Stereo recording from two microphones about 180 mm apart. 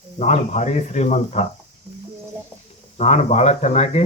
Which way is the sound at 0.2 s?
40° left (ahead or behind).